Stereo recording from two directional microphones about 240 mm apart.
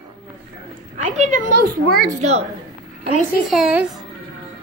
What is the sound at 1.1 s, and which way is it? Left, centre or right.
Speech, right.